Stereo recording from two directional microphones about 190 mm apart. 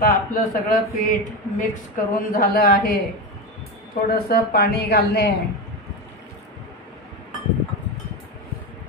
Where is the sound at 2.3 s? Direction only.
50° left (ahead or behind).